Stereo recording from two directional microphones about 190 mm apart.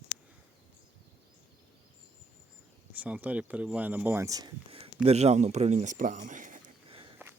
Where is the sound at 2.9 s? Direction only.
10° right (ahead or behind); by 6.6 s 40° right (ahead or behind).